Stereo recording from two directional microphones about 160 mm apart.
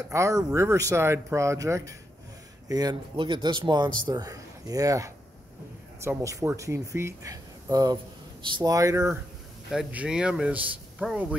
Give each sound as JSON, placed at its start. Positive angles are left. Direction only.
{"t": 0.1, "sound": "a man's voice", "side_deg": -20}
{"t": 9.7, "sound": "speech", "side_deg": -5}